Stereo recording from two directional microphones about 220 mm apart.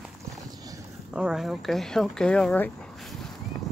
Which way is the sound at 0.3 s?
15° right (ahead or behind).